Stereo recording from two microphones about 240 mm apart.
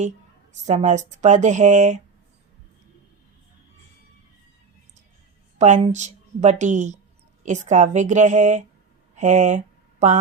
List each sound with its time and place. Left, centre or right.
0.6 s speech: right
5.5 s speech: right